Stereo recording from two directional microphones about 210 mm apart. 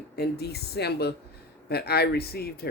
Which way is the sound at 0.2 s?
50° left (ahead or behind).